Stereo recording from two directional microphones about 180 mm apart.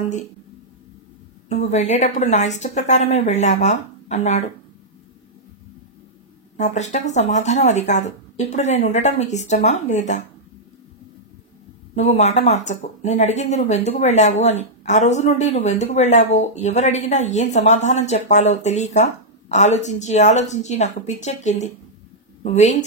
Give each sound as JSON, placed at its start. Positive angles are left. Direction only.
{"t": 1.5, "sound": "speech", "side_deg": 40}
{"t": 6.6, "sound": "speech", "side_deg": 40}
{"t": 11.9, "sound": "speech", "side_deg": 40}